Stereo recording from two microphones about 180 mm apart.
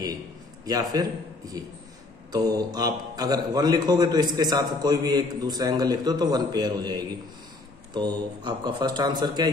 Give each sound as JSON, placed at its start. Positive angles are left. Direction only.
{"t": 0.7, "sound": "a man's voice", "side_deg": -20}
{"t": 2.3, "sound": "a man's voice", "side_deg": -20}